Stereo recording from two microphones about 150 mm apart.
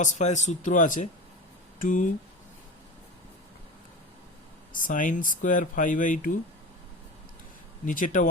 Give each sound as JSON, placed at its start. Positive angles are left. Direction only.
{"t": 0.0, "sound": "speech", "side_deg": 55}
{"t": 4.7, "sound": "speech", "side_deg": 60}
{"t": 7.9, "sound": "speech", "side_deg": 60}